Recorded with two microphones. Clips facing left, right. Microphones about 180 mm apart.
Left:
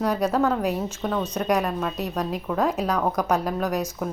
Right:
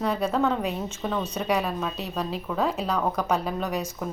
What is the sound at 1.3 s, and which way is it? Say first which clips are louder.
Speech: left 3 dB; 10° right (ahead or behind).